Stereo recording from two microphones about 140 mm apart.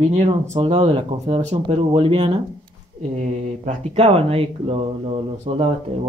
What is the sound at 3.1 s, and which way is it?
Speech, 50° right (ahead or behind).